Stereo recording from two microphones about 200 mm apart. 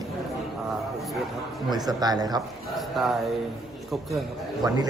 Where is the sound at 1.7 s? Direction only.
20° right (ahead or behind).